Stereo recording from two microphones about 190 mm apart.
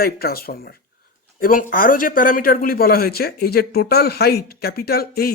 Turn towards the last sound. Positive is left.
turn(degrees=55)  # may be behind; listen again after turning